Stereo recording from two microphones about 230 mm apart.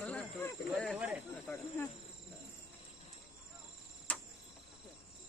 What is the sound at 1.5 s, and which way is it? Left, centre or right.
Insect, centre.